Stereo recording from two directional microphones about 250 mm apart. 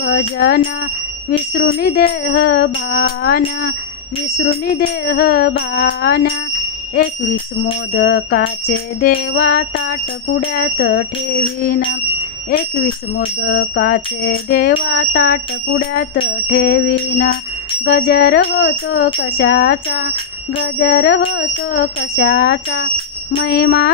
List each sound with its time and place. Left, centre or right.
0.4 s bicycle bell: left
1.8 s bicycle bell: left
7.9 s bicycle bell: left